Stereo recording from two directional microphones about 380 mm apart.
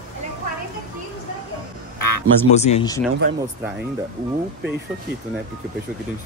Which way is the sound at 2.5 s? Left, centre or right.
Centre.